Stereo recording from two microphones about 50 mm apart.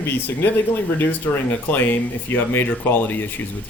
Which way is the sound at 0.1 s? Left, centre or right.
Left.